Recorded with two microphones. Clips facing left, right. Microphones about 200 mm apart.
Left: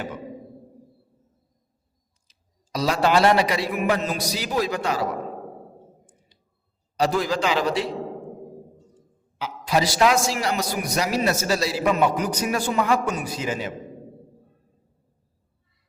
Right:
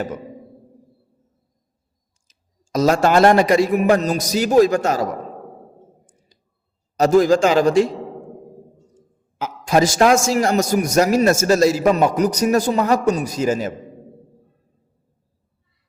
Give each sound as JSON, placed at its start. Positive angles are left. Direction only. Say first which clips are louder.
{"t": 2.3, "sound": "clicking", "louder": "right 3 dB", "side_deg": -45}
{"t": 2.7, "sound": "a man's voice", "louder": "right 5 dB", "side_deg": -45}
{"t": 6.3, "sound": "clicking", "louder": "right 3 dB", "side_deg": -40}
{"t": 6.9, "sound": "a man's voice", "louder": "right 9 dB", "side_deg": -45}
{"t": 9.4, "sound": "a man's voice", "louder": "right 6 dB", "side_deg": -45}